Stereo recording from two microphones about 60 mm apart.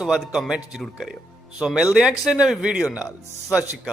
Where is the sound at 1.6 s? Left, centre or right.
Centre.